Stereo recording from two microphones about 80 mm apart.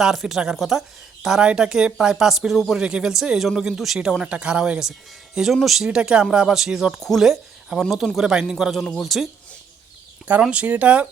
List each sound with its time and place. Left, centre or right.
0.0 s speech: centre
10.4 s speech: centre